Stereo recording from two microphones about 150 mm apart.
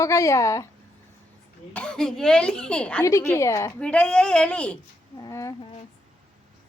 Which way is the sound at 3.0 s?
20° left (ahead or behind).